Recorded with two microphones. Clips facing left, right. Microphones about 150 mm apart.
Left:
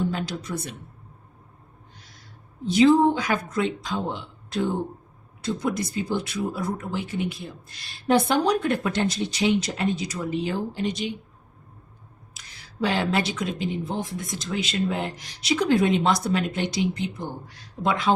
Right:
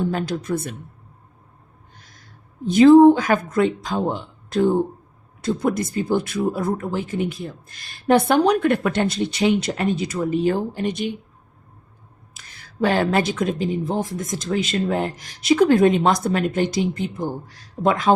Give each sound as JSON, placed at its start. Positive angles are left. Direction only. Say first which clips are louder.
{"t": 0.1, "sound": "speech", "louder": "right 6 dB", "side_deg": -50}
{"t": 2.0, "sound": "owl", "louder": "right 1 dB", "side_deg": -50}
{"t": 2.6, "sound": "speech", "louder": "right 7 dB", "side_deg": -50}
{"t": 12.3, "sound": "speech", "louder": "right 3 dB", "side_deg": -50}